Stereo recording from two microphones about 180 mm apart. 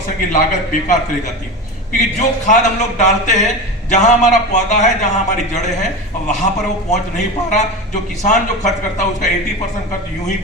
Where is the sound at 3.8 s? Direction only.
40° left (ahead or behind).